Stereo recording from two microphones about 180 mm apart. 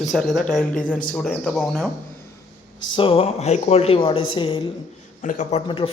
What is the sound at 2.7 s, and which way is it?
Speech, 30° left (ahead or behind).